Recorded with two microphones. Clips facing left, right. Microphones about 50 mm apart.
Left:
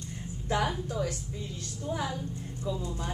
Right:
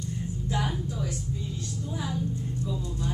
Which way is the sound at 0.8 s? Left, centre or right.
Left.